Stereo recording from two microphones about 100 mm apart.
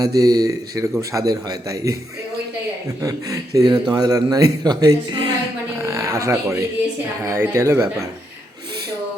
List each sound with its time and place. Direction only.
0.0 s a man's voice: 40° right (ahead or behind)
3.0 s a man's voice: 35° right (ahead or behind)
5.8 s speech: 30° right (ahead or behind)